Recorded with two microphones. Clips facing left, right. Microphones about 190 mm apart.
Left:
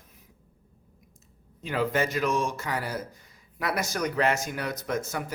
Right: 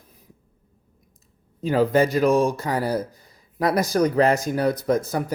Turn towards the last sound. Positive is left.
turn(degrees=-35)  # may be behind; listen again after turning